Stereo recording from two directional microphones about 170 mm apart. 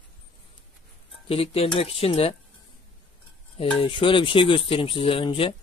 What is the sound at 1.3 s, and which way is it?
Speech, 35° left (ahead or behind).